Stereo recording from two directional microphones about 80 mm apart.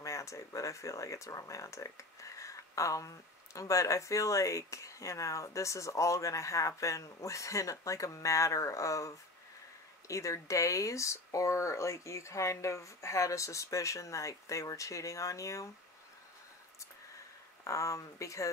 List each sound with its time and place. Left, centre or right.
0.0 s speech: left
17.6 s speech: left